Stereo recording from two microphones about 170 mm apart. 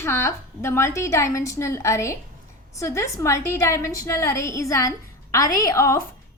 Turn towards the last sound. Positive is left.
turn(degrees=20)  # may be behind; listen again after turning